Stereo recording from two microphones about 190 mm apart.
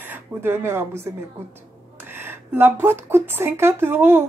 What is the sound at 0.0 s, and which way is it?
Speech, 10° right (ahead or behind).